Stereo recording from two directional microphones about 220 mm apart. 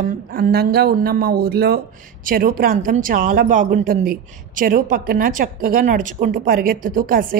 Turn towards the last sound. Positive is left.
turn(degrees=-40)  # may be behind; listen again after turning